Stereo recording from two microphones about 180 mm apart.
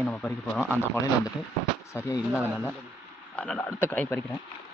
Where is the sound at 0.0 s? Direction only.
10° left (ahead or behind).